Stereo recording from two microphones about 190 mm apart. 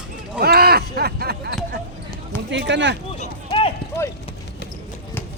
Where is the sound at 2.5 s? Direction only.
70° right (ahead or behind).